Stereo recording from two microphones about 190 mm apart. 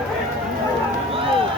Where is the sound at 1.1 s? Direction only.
30° right (ahead or behind).